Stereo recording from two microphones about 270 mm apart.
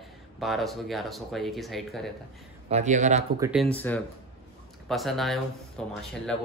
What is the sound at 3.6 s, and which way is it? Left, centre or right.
Speech, centre.